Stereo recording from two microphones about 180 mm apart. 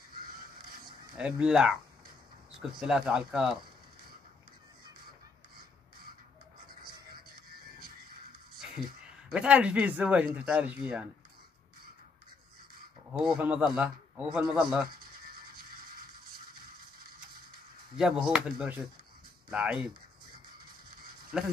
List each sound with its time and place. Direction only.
0.3 s crow: 55° right (ahead or behind)
1.1 s a man's voice: 5° right (ahead or behind)
2.8 s a man's voice: 5° right (ahead or behind)
8.5 s a sound: 5° right (ahead or behind)
9.3 s speech: 5° right (ahead or behind)
13.2 s a man's voice: 5° right (ahead or behind)
15.2 s a sound: 55° right (ahead or behind)
17.9 s a man's voice: 5° right (ahead or behind)
21.3 s a man's voice: 5° right (ahead or behind)